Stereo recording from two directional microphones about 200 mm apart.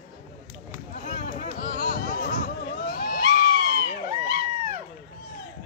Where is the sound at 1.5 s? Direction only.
45° left (ahead or behind).